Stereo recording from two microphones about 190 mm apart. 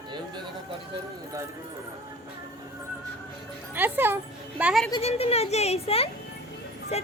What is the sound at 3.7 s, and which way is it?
A woman's voice, 10° right (ahead or behind).